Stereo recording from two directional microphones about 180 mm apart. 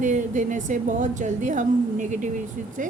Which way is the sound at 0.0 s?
45° right (ahead or behind).